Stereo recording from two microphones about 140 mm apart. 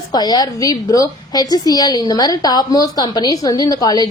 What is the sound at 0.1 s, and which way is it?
A woman's voice, 30° left (ahead or behind).